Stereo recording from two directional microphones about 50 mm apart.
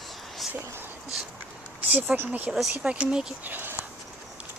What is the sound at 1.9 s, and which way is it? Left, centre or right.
Speech, right.